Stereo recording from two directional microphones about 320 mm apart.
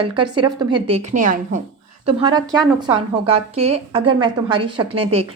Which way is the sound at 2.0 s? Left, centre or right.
Centre.